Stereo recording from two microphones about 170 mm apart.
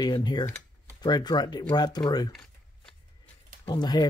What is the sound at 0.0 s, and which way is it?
Speech, 25° left (ahead or behind).